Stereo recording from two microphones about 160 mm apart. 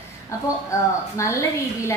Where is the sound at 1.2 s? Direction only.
20° left (ahead or behind).